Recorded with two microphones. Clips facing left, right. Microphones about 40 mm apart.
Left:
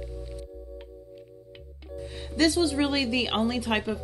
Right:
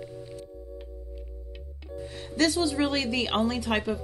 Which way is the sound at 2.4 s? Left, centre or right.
Centre.